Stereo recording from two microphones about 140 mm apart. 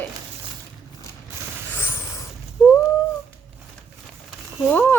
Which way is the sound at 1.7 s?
15° left (ahead or behind).